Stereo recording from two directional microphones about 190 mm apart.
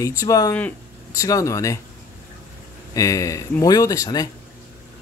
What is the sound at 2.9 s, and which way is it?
Speech, 15° left (ahead or behind).